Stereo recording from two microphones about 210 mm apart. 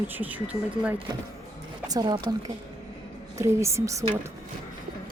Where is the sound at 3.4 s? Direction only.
15° right (ahead or behind).